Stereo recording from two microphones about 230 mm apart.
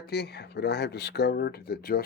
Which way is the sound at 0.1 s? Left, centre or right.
Left.